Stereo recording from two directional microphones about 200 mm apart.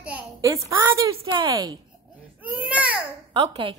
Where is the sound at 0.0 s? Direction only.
10° right (ahead or behind).